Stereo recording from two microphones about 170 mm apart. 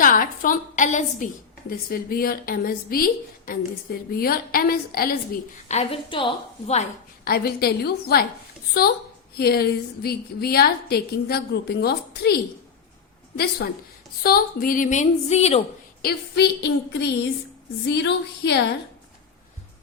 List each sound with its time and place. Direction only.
0.0 s a woman's voice: 50° left (ahead or behind)
1.9 s a woman's voice: 60° left (ahead or behind)
5.6 s a woman's voice: 40° left (ahead or behind)
7.3 s a woman's voice: 65° left (ahead or behind); by 15.6 s 40° left (ahead or behind)
16.0 s a woman's voice: 70° left (ahead or behind); by 18.6 s 85° left